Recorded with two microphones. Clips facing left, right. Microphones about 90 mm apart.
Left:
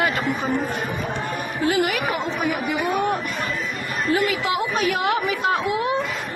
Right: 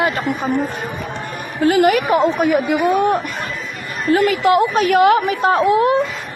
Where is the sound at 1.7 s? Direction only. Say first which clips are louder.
Right 9 dB; 55° right (ahead or behind).